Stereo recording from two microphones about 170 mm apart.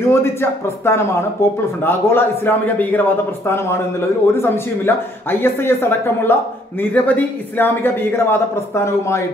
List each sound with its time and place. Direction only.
0.1 s a man's voice: 15° left (ahead or behind)